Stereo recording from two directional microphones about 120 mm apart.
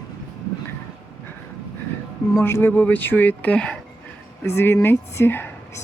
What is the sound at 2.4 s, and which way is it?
Speech, 20° left (ahead or behind).